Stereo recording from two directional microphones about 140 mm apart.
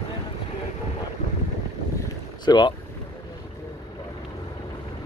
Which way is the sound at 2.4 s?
30° left (ahead or behind).